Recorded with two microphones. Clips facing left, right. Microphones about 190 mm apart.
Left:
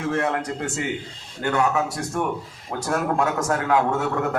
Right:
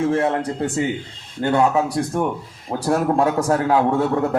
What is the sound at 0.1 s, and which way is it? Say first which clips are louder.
A man's voice: right 4 dB; 30° right (ahead or behind).